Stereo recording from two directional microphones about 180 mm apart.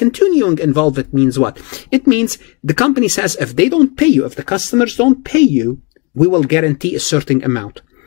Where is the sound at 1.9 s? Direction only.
40° left (ahead or behind).